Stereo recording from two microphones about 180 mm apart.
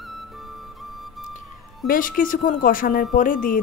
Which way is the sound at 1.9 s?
50° left (ahead or behind).